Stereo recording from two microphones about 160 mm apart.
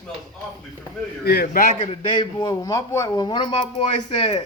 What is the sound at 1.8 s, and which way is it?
A man's voice, 40° left (ahead or behind).